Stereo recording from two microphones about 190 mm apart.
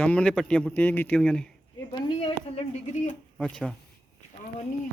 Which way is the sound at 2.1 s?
25° left (ahead or behind).